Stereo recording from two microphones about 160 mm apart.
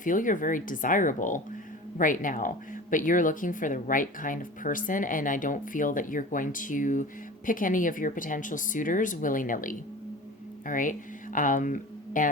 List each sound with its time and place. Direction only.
0.0 s speech: 55° left (ahead or behind)